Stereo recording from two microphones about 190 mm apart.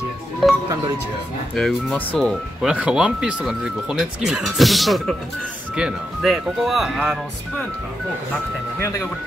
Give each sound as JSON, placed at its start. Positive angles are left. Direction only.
{"t": 1.5, "sound": "speech", "side_deg": 0}
{"t": 8.7, "sound": "speech", "side_deg": 15}